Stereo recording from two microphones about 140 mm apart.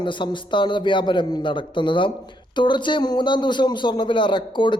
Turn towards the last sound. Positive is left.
turn(degrees=35)  # may be behind; listen again after turning